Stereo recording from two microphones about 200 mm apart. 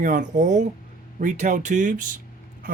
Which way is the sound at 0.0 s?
40° right (ahead or behind).